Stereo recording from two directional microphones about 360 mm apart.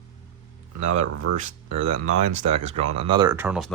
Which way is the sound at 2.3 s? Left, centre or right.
Centre.